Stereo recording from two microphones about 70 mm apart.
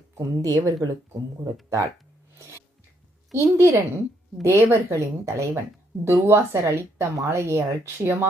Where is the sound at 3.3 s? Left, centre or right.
Right.